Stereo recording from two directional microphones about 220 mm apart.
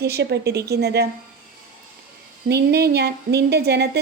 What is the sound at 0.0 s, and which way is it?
Speech, 50° right (ahead or behind).